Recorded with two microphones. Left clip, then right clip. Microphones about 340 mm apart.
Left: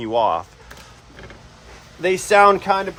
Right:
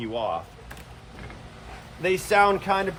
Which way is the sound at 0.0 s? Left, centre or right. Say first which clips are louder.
Left 10 dB; centre.